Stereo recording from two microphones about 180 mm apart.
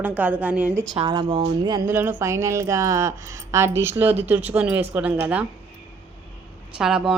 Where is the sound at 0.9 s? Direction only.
25° right (ahead or behind); by 5.5 s 10° right (ahead or behind).